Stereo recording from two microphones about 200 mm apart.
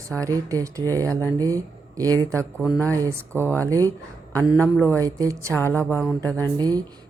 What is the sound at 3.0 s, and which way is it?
Speech, 15° right (ahead or behind).